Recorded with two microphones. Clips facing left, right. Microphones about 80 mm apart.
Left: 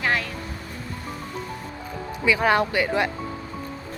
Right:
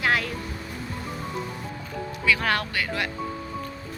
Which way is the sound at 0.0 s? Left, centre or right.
Centre.